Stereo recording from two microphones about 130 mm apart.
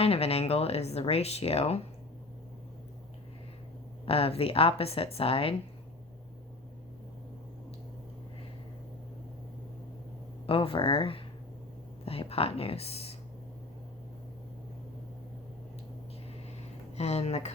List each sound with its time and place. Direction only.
0.0 s speech: 50° left (ahead or behind)
4.0 s speech: 50° left (ahead or behind)
10.4 s speech: 45° left (ahead or behind)
17.0 s speech: 55° left (ahead or behind)